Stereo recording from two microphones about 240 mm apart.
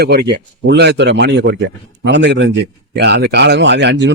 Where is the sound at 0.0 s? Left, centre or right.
Right.